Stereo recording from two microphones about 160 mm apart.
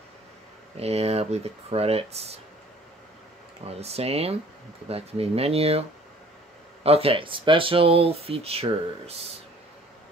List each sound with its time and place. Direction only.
0.7 s speech: 40° right (ahead or behind)
3.6 s speech: 40° right (ahead or behind)